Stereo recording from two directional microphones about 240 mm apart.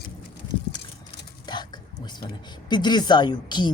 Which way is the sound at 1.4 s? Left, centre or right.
Centre.